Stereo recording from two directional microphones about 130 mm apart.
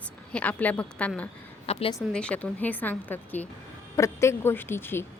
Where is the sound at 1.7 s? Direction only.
50° left (ahead or behind).